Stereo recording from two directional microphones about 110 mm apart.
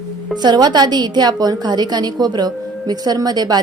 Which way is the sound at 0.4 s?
40° right (ahead or behind).